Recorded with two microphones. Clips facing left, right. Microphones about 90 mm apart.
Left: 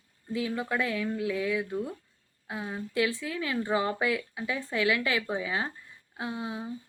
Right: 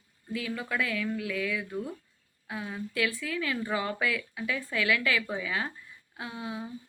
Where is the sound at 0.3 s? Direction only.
25° left (ahead or behind).